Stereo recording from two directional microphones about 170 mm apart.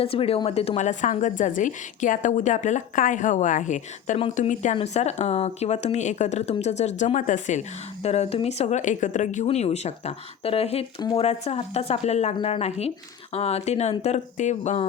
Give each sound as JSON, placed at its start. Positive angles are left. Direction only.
{"t": 0.0, "sound": "a woman's voice", "side_deg": 35}